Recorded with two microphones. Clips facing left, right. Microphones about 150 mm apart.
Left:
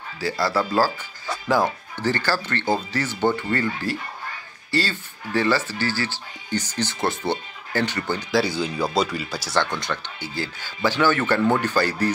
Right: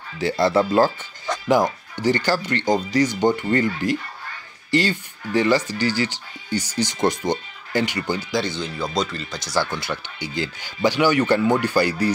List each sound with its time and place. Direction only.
0.2 s speech: 25° right (ahead or behind)
8.3 s speech: 5° left (ahead or behind)
9.6 s speech: 5° right (ahead or behind)
10.3 s speech: 15° right (ahead or behind)